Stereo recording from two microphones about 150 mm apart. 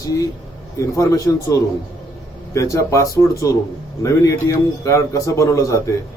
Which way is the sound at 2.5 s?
20° left (ahead or behind).